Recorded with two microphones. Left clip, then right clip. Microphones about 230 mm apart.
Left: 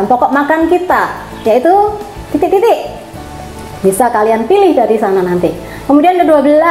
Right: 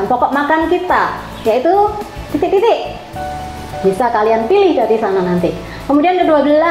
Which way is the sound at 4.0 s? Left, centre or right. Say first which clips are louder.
Left 3 dB; left.